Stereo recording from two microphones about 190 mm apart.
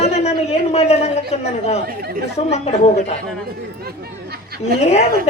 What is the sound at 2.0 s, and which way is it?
Speech, 55° right (ahead or behind).